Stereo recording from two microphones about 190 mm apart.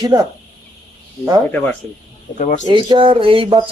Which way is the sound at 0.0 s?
20° right (ahead or behind).